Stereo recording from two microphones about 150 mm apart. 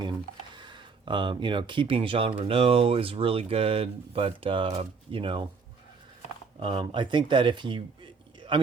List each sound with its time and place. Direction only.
0.5 s speech: 30° right (ahead or behind)
6.6 s speech: 35° right (ahead or behind)